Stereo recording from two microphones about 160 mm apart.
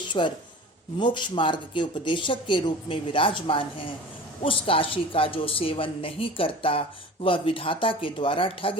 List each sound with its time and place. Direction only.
0.1 s speech: 30° left (ahead or behind)